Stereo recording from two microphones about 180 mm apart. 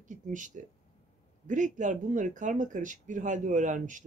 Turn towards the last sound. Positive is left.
turn(degrees=-45)  # may be behind; listen again after turning